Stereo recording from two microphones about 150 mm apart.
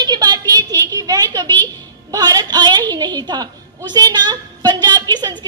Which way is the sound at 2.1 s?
25° right (ahead or behind).